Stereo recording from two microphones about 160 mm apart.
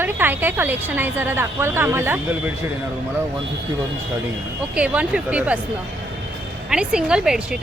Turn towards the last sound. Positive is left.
turn(degrees=-5)  # may be behind; listen again after turning